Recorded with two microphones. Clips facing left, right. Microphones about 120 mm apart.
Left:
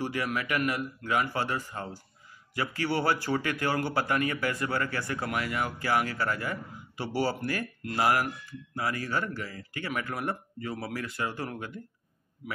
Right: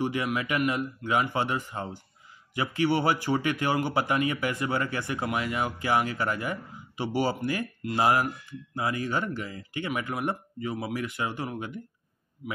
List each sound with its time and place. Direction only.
0.0 s a man's voice: 20° right (ahead or behind)